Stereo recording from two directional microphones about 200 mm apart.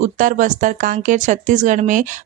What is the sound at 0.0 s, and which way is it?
Speech, 40° right (ahead or behind).